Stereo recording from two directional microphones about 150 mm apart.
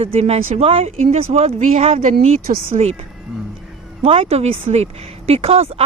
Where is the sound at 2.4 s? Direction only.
85° right.